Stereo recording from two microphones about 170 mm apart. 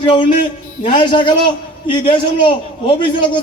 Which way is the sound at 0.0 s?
30° left (ahead or behind).